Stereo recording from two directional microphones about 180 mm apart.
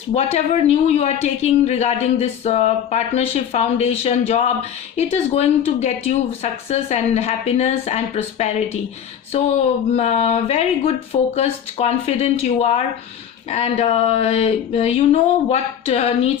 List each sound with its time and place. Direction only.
0.1 s speech: 35° left (ahead or behind)